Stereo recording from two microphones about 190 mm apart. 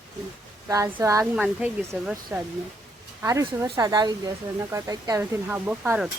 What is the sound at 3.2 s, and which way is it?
Speech, 15° right (ahead or behind).